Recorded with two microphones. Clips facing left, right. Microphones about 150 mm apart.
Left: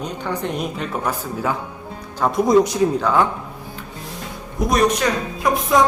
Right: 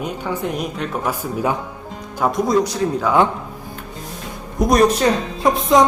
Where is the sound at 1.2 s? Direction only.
20° right (ahead or behind).